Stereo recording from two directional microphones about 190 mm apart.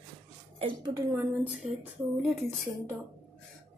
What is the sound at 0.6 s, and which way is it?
Speech, 25° right (ahead or behind).